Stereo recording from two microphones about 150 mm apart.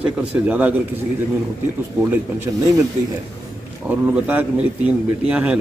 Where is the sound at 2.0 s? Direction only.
15° right (ahead or behind).